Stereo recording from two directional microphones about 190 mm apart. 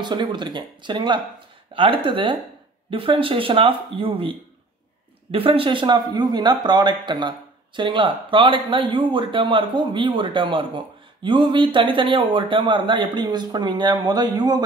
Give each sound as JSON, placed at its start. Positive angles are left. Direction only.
{"t": 0.0, "sound": "a man's voice", "side_deg": -25}